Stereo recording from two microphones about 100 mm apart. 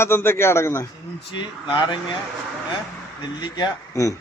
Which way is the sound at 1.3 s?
50° left (ahead or behind).